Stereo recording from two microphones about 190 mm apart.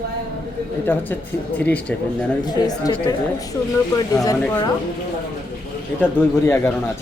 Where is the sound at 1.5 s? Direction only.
10° left (ahead or behind).